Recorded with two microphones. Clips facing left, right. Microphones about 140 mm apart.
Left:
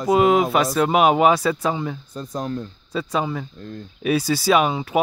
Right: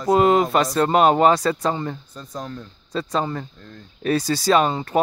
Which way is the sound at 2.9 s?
5° left (ahead or behind).